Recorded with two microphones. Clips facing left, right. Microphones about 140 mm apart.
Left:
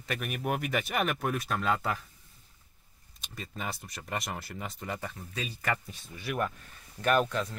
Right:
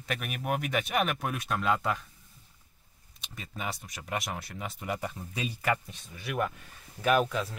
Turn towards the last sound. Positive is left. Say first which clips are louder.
# right 1 dB
turn(degrees=0)  # may be behind; listen again after turning